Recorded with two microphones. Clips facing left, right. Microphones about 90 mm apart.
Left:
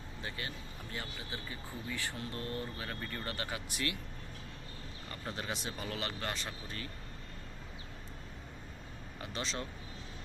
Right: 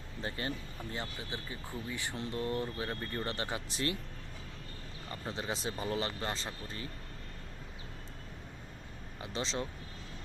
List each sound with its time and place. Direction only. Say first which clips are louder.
0.2 s speech: right 5 dB; 35° right (ahead or behind)
0.9 s speech: right 1 dB; 25° right (ahead or behind)
5.3 s speech: right 3 dB; 25° right (ahead or behind)
9.2 s speech: right 3 dB; 25° right (ahead or behind)